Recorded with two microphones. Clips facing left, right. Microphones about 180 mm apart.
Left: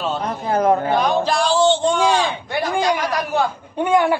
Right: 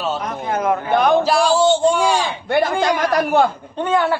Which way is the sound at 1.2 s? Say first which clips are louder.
Right 2 dB; 10° right (ahead or behind).